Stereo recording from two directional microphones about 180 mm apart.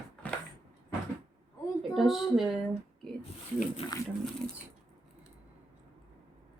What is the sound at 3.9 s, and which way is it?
Speech, 20° left (ahead or behind).